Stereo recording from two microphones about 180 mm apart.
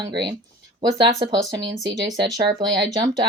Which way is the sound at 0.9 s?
20° right (ahead or behind).